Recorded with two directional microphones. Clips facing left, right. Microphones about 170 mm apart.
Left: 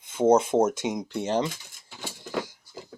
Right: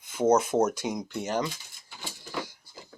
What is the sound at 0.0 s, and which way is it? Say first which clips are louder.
Speech: left 3 dB; 25° left (ahead or behind).